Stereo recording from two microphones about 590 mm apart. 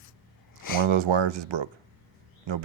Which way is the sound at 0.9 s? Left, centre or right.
Right.